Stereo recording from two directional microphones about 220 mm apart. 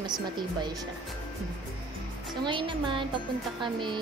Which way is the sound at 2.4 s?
20° right (ahead or behind).